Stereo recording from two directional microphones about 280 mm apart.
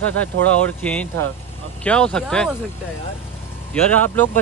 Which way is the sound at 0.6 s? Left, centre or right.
Centre.